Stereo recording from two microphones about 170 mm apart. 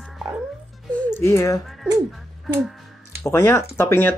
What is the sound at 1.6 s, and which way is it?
Speech, centre (ahead or behind).